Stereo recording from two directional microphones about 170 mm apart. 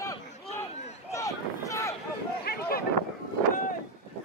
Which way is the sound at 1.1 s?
20° left (ahead or behind).